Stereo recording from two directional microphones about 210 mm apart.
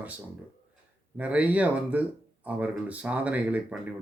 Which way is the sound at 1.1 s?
5° right (ahead or behind).